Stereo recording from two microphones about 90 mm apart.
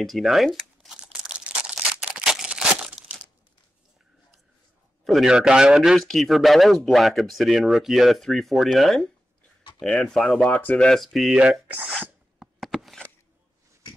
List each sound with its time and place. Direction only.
0.0 s speech: centre (ahead or behind)
0.9 s a sound: 10° right (ahead or behind)
5.0 s a man's voice: 5° right (ahead or behind)
10.4 s speech: 20° left (ahead or behind)
10.8 s a man's voice: 5° left (ahead or behind)
11.6 s speech: 15° right (ahead or behind)
12.4 s a sound: centre (ahead or behind)